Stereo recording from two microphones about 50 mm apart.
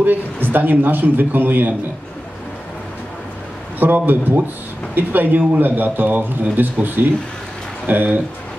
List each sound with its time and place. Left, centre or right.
0.0 s a man's voice: right
3.8 s a man's voice: right